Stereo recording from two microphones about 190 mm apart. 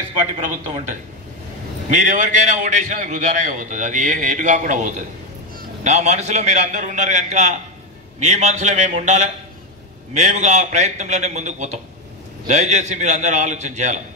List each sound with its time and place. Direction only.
0.7 s a man's voice: 40° right (ahead or behind)
2.0 s a man's voice: 40° right (ahead or behind)